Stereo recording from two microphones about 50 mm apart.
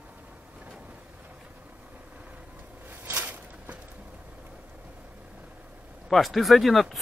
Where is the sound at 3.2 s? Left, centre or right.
Right.